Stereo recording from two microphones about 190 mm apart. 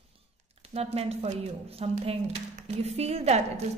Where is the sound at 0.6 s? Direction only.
30° right (ahead or behind).